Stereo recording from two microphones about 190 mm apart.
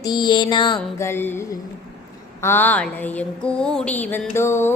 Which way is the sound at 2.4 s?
10° left (ahead or behind).